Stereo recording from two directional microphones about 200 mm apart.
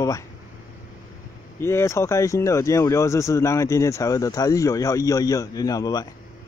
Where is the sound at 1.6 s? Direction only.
15° left (ahead or behind).